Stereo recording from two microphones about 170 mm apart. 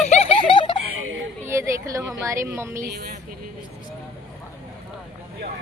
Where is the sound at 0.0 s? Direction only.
40° left (ahead or behind).